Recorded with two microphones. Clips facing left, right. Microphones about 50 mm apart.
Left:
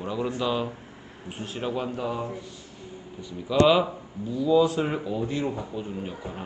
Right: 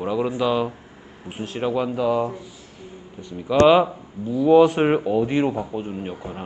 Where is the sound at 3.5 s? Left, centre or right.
Centre.